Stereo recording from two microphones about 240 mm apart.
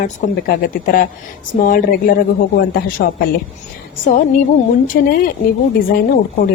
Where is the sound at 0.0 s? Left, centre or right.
Left.